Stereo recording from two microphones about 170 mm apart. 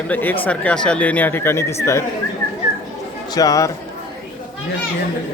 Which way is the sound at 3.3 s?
20° left (ahead or behind).